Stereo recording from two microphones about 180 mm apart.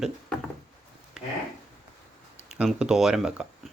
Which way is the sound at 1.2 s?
5° right (ahead or behind).